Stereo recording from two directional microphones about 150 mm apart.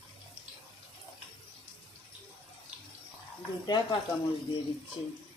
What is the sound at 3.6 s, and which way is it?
Speech, 30° left (ahead or behind).